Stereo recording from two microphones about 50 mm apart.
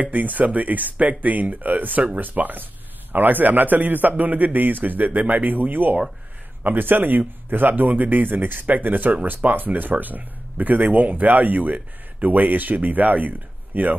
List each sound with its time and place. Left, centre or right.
0.0 s a man's voice: right